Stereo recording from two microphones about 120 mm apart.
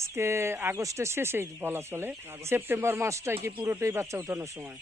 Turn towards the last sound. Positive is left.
turn(degrees=-25)  # may be behind; listen again after turning